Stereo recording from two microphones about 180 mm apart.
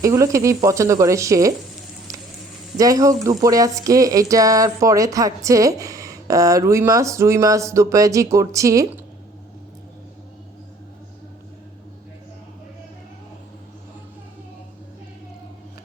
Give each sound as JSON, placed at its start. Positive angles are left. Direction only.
{"t": 0.0, "sound": "speech", "side_deg": -15}
{"t": 2.7, "sound": "speech", "side_deg": -20}